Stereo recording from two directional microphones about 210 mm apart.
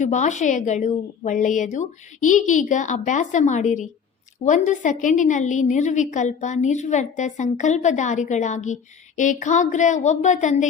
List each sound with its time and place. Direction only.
0.0 s a woman's voice: 35° left (ahead or behind)